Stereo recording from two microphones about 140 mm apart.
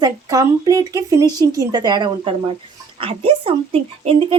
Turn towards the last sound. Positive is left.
turn(degrees=-45)  # may be behind; listen again after turning